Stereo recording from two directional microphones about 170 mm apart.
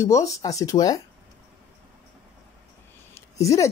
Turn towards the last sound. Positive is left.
turn(degrees=20)  # may be behind; listen again after turning